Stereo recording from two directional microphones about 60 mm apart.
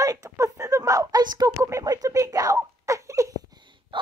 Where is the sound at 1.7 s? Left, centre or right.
Right.